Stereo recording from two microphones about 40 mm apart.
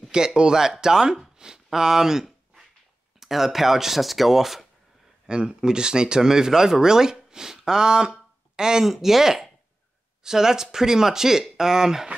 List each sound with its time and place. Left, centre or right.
0.0 s speech: centre
1.2 s a sound: centre
3.2 s speech: centre
5.2 s speech: right